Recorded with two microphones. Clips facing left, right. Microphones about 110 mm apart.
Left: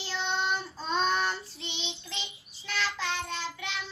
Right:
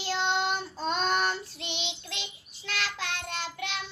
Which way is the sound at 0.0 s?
70° right (ahead or behind).